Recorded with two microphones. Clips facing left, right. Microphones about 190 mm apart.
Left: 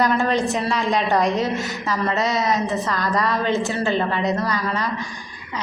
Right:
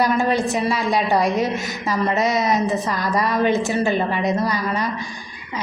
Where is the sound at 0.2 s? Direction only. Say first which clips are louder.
Right 1 dB; 10° right (ahead or behind).